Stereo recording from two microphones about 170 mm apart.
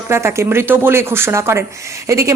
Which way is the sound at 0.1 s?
15° right (ahead or behind).